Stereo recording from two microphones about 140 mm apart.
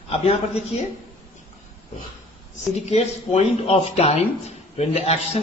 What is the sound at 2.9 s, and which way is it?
Speech, 50° left (ahead or behind).